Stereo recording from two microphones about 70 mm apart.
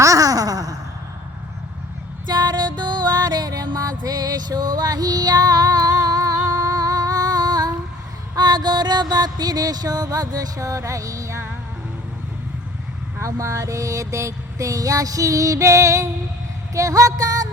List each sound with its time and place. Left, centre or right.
0.0 s a sound: right
2.2 s music: right
8.4 s music: right
13.4 s music: right